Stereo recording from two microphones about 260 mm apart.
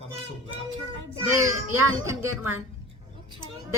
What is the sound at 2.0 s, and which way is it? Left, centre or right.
Speech, centre.